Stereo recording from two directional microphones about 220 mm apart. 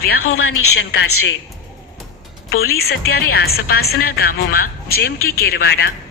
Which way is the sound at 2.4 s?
45° left (ahead or behind).